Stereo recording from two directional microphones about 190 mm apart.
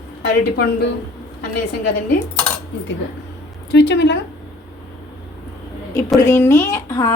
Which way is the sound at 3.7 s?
70° left (ahead or behind).